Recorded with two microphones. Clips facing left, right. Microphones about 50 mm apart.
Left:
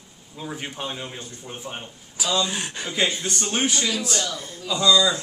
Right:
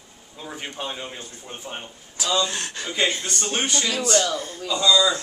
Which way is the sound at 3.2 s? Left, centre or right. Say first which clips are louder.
Left 1 dB; centre.